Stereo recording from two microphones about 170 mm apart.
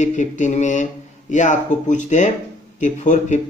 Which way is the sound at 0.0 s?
45° left (ahead or behind).